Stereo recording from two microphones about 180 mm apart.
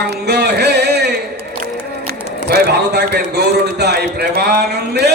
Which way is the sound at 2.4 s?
60° right (ahead or behind).